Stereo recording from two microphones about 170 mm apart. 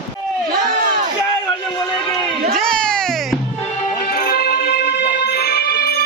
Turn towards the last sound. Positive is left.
turn(degrees=65)  # may be behind; listen again after turning